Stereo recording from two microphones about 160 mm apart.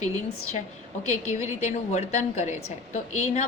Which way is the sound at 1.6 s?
45° left (ahead or behind).